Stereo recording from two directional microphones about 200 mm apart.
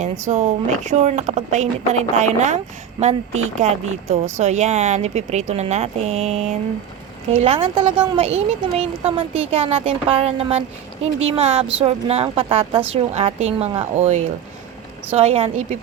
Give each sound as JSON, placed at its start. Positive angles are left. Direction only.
{"t": 0.0, "sound": "speech", "side_deg": -35}
{"t": 4.1, "sound": "speech", "side_deg": -35}